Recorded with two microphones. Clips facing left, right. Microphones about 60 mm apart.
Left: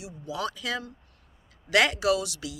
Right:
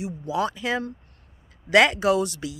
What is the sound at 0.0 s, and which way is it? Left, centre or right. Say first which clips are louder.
Speech: right 7 dB; right.